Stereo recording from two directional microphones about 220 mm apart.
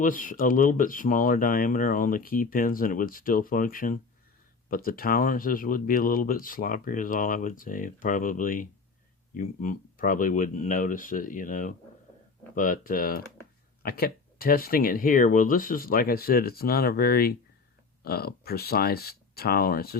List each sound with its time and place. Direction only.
0.0 s speech: 35° left (ahead or behind)